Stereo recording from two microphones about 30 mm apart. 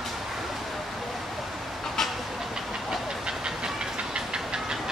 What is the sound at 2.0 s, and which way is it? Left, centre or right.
Train, centre.